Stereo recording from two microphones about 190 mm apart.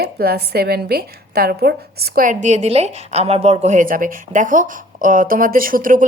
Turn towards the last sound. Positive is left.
turn(degrees=-45)  # may be behind; listen again after turning